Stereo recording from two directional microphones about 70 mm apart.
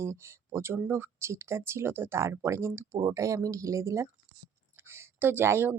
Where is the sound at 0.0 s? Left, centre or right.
Right.